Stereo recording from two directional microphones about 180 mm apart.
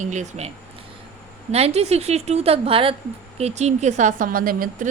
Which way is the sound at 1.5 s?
35° right (ahead or behind).